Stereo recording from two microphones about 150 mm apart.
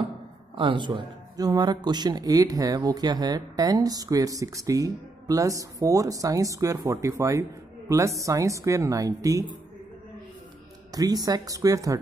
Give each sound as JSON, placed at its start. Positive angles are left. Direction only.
{"t": 0.6, "sound": "speech", "side_deg": -35}
{"t": 10.9, "sound": "speech", "side_deg": -25}